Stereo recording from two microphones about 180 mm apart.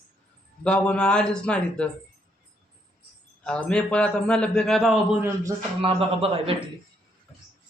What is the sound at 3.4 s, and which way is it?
A man's voice, 5° left (ahead or behind).